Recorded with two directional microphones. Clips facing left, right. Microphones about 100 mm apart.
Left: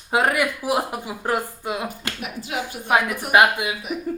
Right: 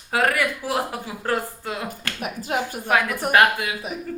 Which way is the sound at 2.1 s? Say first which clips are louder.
Right 4 dB; 45° right (ahead or behind).